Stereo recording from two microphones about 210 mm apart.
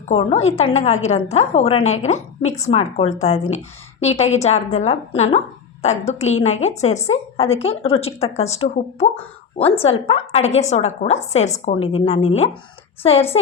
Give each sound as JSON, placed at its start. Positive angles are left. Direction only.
{"t": 0.1, "sound": "a woman's voice", "side_deg": 30}